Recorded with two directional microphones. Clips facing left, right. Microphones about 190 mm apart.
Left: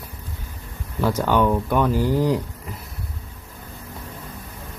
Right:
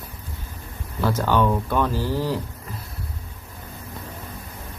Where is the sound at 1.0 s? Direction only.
15° left (ahead or behind).